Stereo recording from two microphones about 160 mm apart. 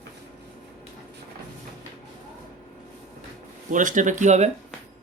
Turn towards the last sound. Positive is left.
turn(degrees=-45)  # may be behind; listen again after turning